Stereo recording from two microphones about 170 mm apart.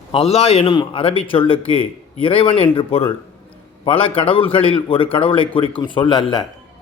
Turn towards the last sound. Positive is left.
turn(degrees=30)  # may be behind; listen again after turning